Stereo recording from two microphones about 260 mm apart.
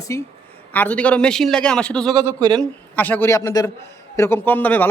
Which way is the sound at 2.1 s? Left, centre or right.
Centre.